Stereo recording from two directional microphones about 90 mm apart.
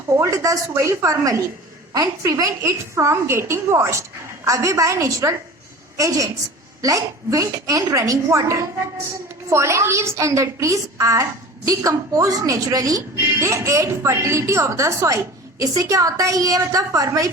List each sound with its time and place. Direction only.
0.2 s a woman's voice: 35° right (ahead or behind)